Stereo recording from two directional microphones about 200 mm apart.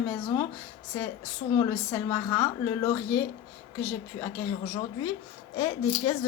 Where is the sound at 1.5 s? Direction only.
15° left (ahead or behind).